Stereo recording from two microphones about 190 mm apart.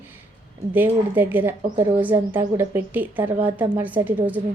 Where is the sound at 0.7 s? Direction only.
10° right (ahead or behind).